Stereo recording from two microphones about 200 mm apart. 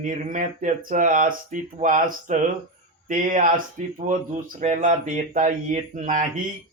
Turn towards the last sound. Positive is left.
turn(degrees=-40)  # may be behind; listen again after turning